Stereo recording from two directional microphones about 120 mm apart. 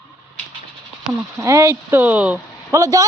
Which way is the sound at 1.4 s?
25° right (ahead or behind).